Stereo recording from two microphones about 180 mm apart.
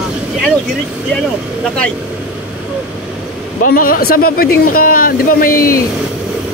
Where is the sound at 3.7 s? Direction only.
50° left (ahead or behind).